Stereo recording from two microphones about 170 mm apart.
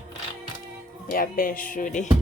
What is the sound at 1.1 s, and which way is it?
Speech, 55° left (ahead or behind).